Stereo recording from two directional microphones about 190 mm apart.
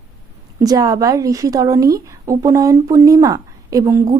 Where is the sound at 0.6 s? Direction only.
20° right (ahead or behind).